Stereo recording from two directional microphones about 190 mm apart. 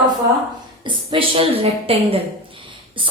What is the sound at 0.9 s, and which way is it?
A woman's voice, 25° right (ahead or behind).